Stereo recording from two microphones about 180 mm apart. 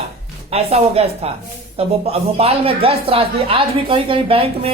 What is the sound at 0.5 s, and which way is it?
Speech, 35° right (ahead or behind).